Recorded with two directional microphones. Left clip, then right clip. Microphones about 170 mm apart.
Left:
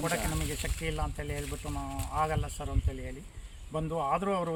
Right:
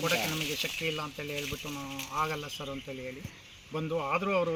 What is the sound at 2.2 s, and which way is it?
A man's voice, 10° left (ahead or behind).